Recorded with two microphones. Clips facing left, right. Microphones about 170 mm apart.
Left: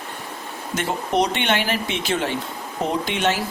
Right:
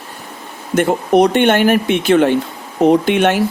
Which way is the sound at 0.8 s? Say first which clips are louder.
Right 10 dB; 55° right (ahead or behind).